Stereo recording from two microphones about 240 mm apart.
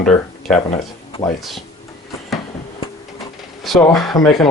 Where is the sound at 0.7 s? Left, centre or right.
Left.